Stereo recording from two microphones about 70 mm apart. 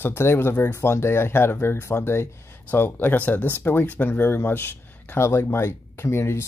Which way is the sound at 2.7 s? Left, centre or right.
Left.